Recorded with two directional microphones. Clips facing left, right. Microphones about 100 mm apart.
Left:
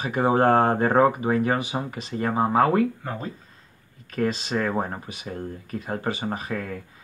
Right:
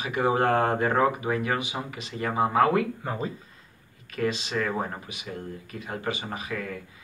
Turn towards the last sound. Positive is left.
turn(degrees=40)  # may be behind; listen again after turning